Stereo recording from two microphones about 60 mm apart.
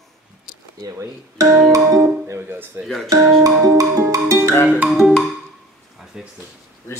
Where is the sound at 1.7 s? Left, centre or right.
Right.